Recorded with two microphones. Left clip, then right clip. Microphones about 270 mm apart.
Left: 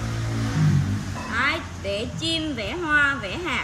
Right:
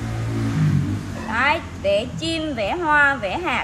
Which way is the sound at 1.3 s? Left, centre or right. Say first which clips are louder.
Right 4 dB; centre.